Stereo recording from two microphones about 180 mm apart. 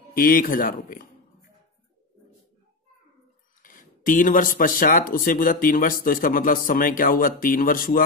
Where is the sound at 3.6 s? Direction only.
50° left (ahead or behind).